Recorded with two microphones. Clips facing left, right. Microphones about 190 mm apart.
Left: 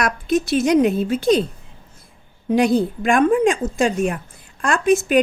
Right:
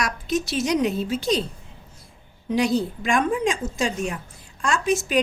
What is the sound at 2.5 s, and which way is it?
A woman's voice, 55° left (ahead or behind).